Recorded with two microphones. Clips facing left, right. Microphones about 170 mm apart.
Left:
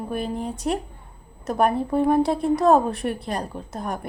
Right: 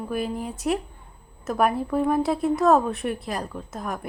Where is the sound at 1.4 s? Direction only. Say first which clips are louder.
Left 2 dB; 35° left (ahead or behind).